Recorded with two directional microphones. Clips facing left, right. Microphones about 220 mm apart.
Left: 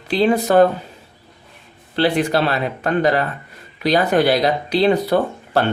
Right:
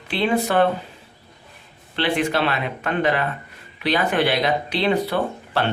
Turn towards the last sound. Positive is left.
turn(degrees=40)  # may be behind; listen again after turning